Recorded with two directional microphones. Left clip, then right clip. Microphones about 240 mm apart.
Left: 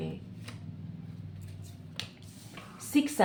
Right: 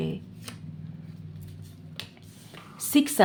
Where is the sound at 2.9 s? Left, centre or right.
Right.